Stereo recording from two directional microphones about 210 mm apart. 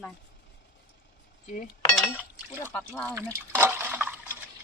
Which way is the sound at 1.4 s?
40° left (ahead or behind).